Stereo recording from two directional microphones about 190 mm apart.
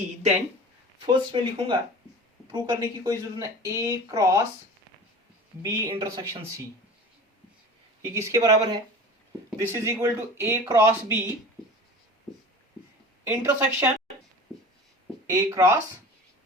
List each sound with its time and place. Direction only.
1.0 s speech: 25° right (ahead or behind)
5.6 s speech: 20° right (ahead or behind)
8.0 s speech: 15° right (ahead or behind)
13.2 s speech: 10° right (ahead or behind)
15.3 s speech: 15° right (ahead or behind)